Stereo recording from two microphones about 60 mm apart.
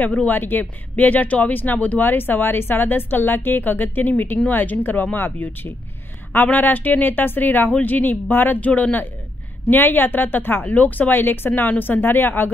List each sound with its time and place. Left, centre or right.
0.0 s speech: left